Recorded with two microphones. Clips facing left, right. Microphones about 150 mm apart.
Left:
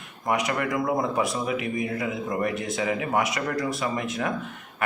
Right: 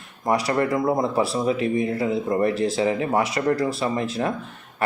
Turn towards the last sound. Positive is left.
turn(degrees=-30)  # may be behind; listen again after turning